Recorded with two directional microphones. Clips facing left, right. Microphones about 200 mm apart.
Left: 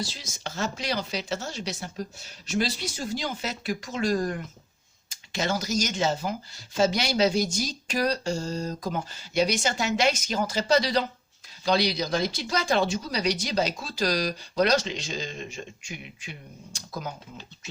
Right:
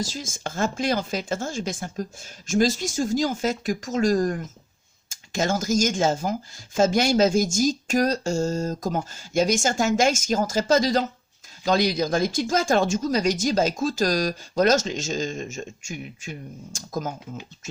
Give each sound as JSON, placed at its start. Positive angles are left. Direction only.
{"t": 0.0, "sound": "speech", "side_deg": -45}